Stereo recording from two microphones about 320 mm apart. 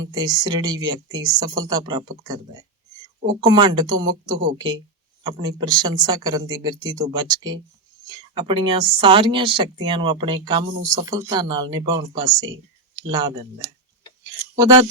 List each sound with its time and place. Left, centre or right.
0.0 s speech: centre